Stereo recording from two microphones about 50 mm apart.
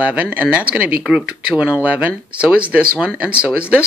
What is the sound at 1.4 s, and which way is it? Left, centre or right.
Speech, right.